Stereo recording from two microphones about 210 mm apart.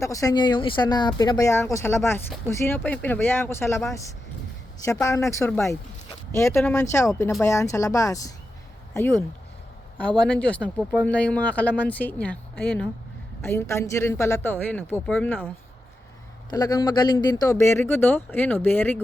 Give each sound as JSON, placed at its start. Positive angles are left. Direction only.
{"t": 0.0, "sound": "speech", "side_deg": 15}
{"t": 5.0, "sound": "speech", "side_deg": 15}
{"t": 10.2, "sound": "speech", "side_deg": 5}